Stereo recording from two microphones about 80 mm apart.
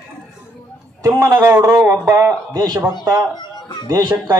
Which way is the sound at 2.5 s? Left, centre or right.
Right.